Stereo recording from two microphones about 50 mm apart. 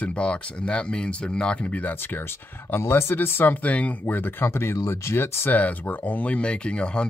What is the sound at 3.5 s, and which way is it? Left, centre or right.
Speech, left.